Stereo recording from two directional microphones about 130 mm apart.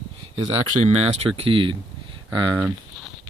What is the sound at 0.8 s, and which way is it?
Speech, 50° right (ahead or behind).